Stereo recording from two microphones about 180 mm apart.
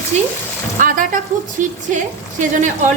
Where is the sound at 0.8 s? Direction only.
45° right (ahead or behind).